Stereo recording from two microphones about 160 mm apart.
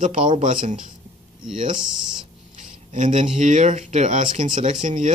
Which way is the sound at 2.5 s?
50° right (ahead or behind).